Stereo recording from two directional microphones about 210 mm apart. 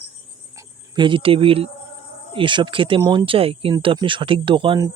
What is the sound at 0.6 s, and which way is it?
Speech, 20° right (ahead or behind).